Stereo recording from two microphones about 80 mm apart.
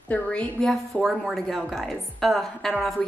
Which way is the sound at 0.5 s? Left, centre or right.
Centre.